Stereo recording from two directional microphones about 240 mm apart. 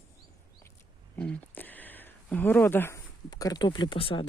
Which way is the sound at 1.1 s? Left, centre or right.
Centre.